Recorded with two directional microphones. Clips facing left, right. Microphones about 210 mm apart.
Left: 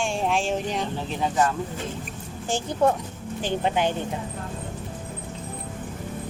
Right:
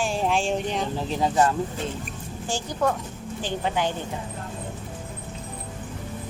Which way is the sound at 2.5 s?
25° left (ahead or behind).